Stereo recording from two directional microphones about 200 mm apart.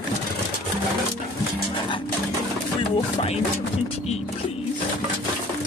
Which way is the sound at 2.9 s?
30° left (ahead or behind).